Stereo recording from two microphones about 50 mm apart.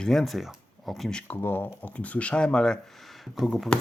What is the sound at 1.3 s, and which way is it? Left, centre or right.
Speech, left.